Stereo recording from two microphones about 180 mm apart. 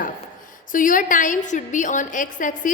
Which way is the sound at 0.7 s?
50° left (ahead or behind).